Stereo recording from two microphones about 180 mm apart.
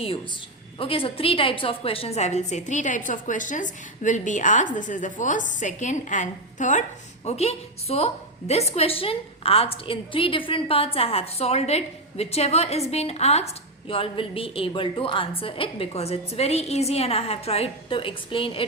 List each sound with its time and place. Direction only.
0.8 s a woman's voice: 30° left (ahead or behind)